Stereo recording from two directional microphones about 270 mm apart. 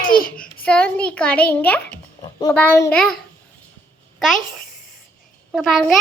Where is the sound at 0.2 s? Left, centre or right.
Left.